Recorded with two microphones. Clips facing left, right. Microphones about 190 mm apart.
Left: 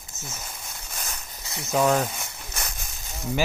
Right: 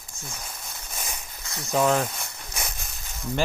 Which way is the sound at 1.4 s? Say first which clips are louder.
Left 2 dB; 25° left (ahead or behind).